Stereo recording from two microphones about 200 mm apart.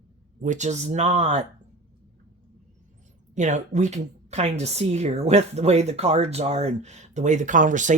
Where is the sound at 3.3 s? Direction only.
35° right (ahead or behind).